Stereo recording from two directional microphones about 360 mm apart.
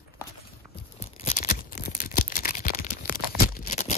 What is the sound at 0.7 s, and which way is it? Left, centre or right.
Tearing, centre.